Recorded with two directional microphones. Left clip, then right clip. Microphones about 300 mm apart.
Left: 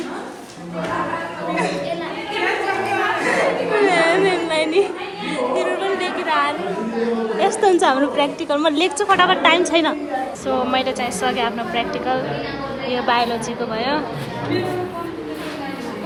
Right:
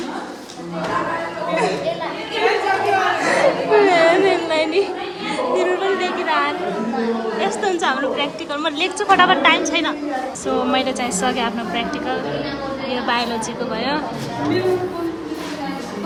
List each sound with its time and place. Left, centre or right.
3.3 s a sound: centre
5.5 s chatter: centre
7.3 s a woman's voice: centre